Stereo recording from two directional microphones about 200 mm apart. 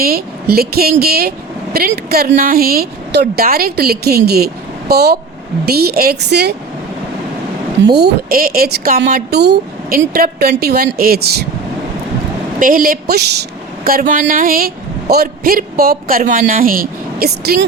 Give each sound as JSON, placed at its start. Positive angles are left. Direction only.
{"t": 0.0, "sound": "speech", "side_deg": -50}
{"t": 7.9, "sound": "speech", "side_deg": -50}
{"t": 12.5, "sound": "speech", "side_deg": -45}